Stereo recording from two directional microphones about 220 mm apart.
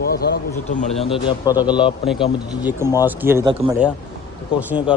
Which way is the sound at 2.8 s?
15° left (ahead or behind).